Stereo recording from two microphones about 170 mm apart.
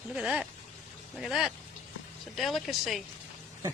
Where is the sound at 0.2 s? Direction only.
5° right (ahead or behind).